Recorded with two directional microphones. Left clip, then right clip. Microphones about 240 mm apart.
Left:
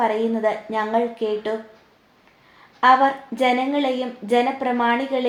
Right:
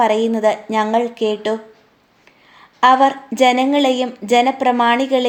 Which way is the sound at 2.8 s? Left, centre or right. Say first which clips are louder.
Right 3 dB; right.